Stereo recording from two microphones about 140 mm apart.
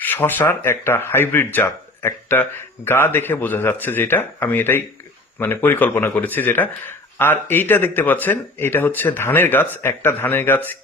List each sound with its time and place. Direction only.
0.0 s a man's voice: 15° left (ahead or behind)